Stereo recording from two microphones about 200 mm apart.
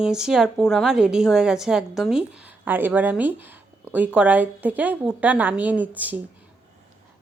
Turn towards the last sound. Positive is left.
turn(degrees=-10)  # may be behind; listen again after turning